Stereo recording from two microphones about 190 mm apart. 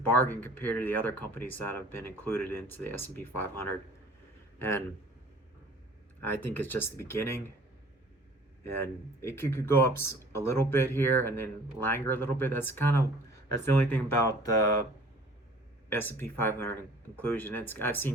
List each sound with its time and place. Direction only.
0.1 s speech: 10° left (ahead or behind)
6.2 s speech: 10° left (ahead or behind)
8.8 s speech: 15° left (ahead or behind)
15.9 s speech: 10° left (ahead or behind)